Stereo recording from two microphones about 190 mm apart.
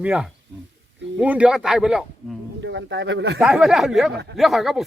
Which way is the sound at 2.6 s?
70° right (ahead or behind).